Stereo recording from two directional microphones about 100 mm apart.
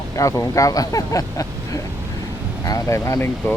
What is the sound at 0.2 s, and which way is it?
Speech, 30° left (ahead or behind).